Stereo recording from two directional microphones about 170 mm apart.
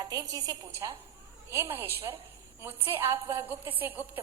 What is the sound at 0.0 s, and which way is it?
A woman's voice, 20° right (ahead or behind).